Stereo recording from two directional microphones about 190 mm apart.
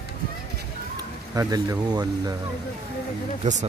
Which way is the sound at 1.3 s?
20° right (ahead or behind).